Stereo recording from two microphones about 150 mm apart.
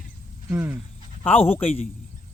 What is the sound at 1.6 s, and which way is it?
Speech, 40° left (ahead or behind).